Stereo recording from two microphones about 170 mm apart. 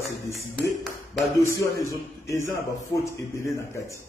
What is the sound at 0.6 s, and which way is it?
Speech, centre (ahead or behind).